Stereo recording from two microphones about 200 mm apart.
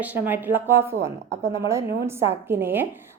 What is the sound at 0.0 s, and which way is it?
A woman's voice, 10° right (ahead or behind).